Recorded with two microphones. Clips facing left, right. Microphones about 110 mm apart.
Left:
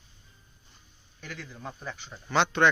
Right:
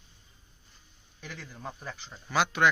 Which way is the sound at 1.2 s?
5° right (ahead or behind).